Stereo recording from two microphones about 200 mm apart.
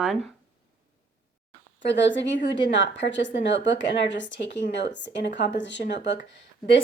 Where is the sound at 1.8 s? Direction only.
65° left (ahead or behind).